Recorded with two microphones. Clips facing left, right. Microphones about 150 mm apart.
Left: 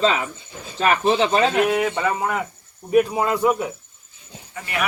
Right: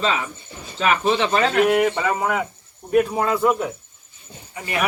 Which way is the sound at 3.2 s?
15° left (ahead or behind).